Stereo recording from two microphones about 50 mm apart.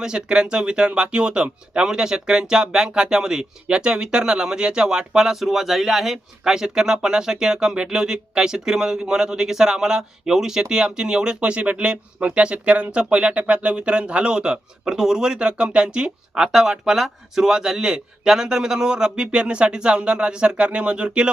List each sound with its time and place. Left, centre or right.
0.0 s speech: centre